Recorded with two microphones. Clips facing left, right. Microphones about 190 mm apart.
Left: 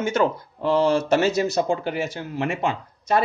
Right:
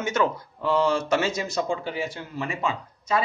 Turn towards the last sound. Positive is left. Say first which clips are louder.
# left 4 dB
turn(degrees=65)  # may be behind; listen again after turning